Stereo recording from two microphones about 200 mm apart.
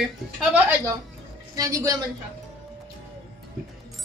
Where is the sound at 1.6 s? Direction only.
15° right (ahead or behind).